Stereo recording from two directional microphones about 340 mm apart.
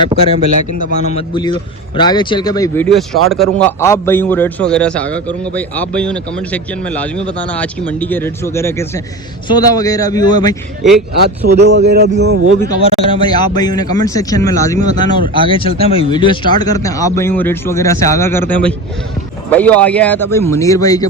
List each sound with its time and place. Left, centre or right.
0.9 s a man's voice: centre
11.2 s speech: right
12.6 s speech: centre